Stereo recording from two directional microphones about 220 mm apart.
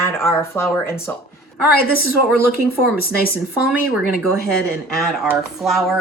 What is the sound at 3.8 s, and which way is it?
Speech, 40° left (ahead or behind).